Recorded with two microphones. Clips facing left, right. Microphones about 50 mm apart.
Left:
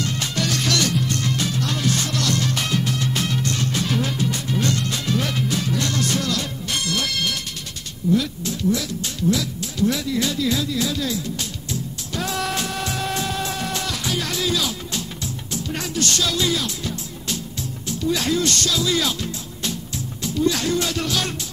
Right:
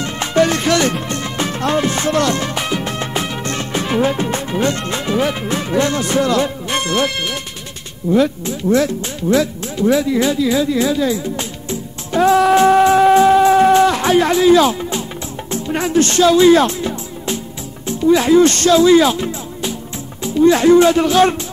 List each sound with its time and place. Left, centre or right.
0.0 s music: right
2.8 s music: right
5.4 s speech: right
12.1 s music: right
15.5 s speech: right
17.8 s speech: right
18.5 s music: right
20.2 s speech: right